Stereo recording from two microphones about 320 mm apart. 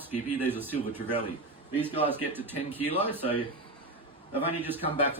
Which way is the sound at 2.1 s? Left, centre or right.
Centre.